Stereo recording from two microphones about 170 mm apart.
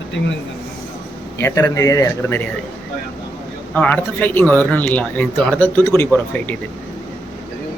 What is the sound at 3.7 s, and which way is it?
Speech, 10° left (ahead or behind).